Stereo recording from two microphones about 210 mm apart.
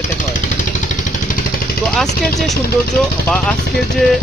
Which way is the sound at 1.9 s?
Centre (ahead or behind).